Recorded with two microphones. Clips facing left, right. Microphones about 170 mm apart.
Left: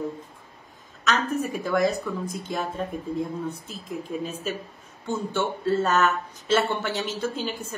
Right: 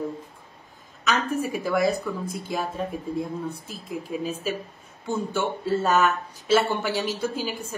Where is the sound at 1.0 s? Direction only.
10° right (ahead or behind).